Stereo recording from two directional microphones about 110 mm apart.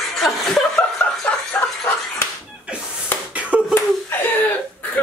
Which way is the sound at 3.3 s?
10° right (ahead or behind).